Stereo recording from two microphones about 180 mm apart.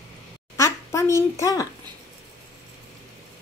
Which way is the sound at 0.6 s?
15° left (ahead or behind).